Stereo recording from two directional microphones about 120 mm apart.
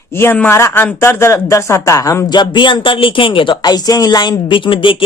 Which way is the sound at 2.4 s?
40° left (ahead or behind).